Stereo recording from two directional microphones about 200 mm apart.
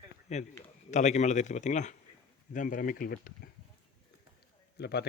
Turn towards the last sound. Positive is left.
turn(degrees=55)  # may be behind; listen again after turning